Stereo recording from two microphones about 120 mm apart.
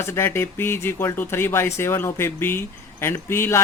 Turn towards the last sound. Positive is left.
turn(degrees=20)  # may be behind; listen again after turning